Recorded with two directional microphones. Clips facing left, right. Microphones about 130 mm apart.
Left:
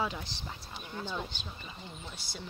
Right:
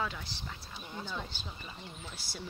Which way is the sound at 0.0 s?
20° left (ahead or behind).